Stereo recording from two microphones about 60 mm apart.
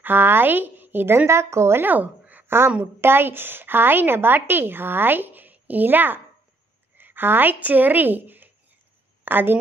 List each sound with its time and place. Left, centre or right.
0.0 s a woman's voice: right
1.8 s speech: right
2.4 s a sound: right
3.0 s a woman's voice: right